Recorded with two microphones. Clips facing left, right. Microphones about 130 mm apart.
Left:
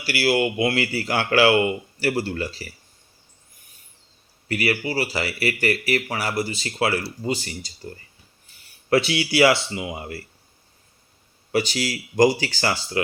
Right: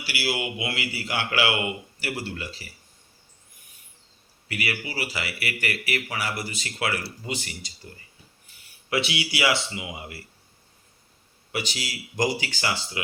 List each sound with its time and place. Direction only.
0.0 s speech: 50° left (ahead or behind)
4.4 s speech: 40° left (ahead or behind)
11.5 s speech: 35° left (ahead or behind)